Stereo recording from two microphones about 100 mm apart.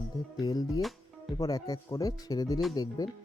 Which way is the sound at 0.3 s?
40° left (ahead or behind).